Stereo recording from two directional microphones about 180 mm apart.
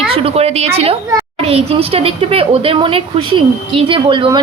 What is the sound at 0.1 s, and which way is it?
A woman's voice, 30° right (ahead or behind).